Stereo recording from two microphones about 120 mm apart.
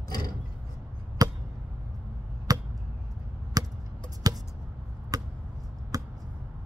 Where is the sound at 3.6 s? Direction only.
30° right (ahead or behind).